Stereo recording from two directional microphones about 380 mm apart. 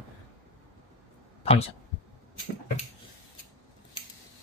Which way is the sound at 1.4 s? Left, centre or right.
Centre.